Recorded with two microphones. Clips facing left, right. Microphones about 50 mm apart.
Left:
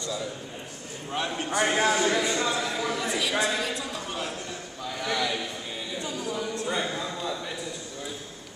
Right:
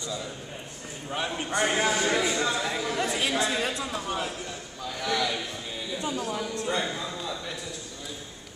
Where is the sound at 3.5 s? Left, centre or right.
Right.